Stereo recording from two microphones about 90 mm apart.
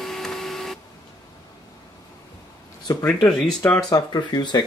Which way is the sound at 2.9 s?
45° left (ahead or behind).